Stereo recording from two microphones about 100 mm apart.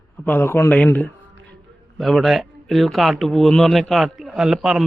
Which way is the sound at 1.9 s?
Centre (ahead or behind).